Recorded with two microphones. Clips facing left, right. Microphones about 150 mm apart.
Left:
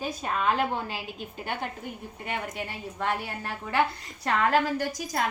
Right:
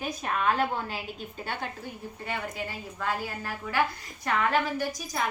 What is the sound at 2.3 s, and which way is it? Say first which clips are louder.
A woman's voice: left 1 dB; 25° left (ahead or behind).